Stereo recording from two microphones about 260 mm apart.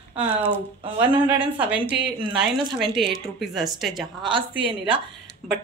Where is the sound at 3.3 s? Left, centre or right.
Centre.